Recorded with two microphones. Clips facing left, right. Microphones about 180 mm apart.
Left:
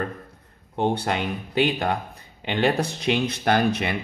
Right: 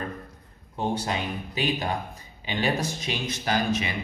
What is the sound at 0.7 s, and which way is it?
Speech, 65° left (ahead or behind).